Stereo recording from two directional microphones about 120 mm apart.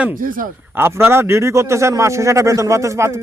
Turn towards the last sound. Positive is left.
turn(degrees=-25)  # may be behind; listen again after turning